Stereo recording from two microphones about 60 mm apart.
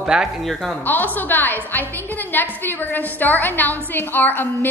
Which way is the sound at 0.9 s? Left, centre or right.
Left.